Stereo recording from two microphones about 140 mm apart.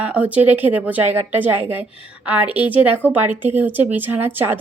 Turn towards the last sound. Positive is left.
turn(degrees=-15)  # may be behind; listen again after turning